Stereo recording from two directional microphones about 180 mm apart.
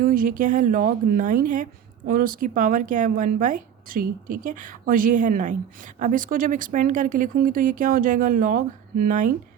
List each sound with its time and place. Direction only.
0.0 s speech: 50° right (ahead or behind)